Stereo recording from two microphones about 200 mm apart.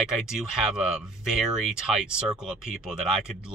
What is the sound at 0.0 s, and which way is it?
Speech, 5° right (ahead or behind).